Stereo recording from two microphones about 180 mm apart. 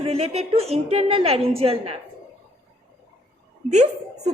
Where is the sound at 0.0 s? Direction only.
35° right (ahead or behind).